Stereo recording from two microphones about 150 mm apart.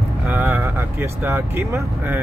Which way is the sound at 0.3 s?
15° right (ahead or behind).